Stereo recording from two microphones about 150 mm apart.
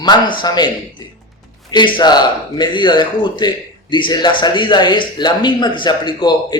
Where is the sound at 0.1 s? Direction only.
30° left (ahead or behind).